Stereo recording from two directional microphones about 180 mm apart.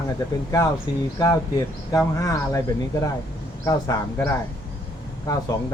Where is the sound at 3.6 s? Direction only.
20° left (ahead or behind).